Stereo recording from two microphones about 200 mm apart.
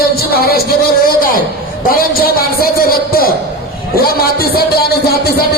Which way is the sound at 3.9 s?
50° left (ahead or behind).